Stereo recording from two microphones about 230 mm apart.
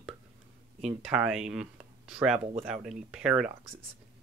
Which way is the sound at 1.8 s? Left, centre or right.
Centre.